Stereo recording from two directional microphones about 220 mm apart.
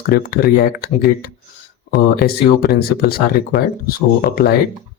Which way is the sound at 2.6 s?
45° left (ahead or behind).